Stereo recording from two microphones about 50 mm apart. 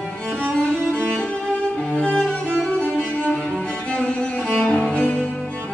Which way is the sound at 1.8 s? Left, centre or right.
Centre.